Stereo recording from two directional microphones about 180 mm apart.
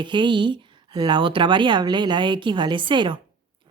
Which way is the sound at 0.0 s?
25° right (ahead or behind).